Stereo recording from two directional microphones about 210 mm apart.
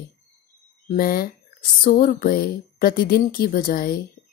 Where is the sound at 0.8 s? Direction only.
45° left (ahead or behind).